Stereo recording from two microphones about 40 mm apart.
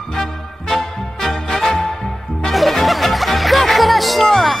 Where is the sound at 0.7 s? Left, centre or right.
Centre.